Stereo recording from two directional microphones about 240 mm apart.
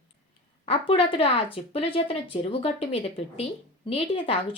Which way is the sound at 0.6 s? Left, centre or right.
Left.